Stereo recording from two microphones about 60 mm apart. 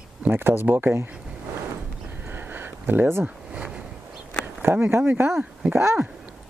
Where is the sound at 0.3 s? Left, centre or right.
Right.